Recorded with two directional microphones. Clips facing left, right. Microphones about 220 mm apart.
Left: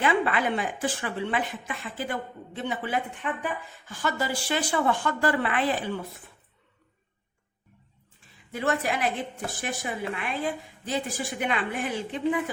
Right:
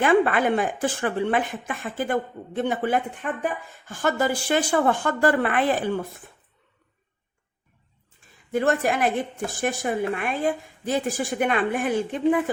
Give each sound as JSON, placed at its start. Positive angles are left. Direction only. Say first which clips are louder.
{"t": 0.0, "sound": "a woman's voice", "louder": "right 6 dB", "side_deg": -50}
{"t": 8.5, "sound": "a woman's voice", "louder": "right 5 dB", "side_deg": -50}